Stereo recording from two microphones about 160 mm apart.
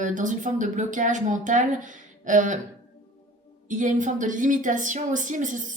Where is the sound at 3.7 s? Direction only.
50° right (ahead or behind).